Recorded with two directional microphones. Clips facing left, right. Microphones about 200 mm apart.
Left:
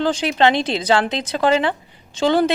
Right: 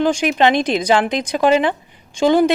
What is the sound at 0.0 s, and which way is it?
Speech, 15° right (ahead or behind).